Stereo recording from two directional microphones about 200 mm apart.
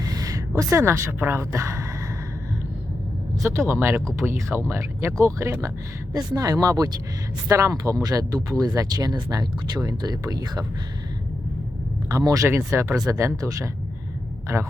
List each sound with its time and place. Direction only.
0.0 s a woman's voice: 15° right (ahead or behind)
3.4 s speech: 15° right (ahead or behind)
12.0 s a man's voice: 15° right (ahead or behind)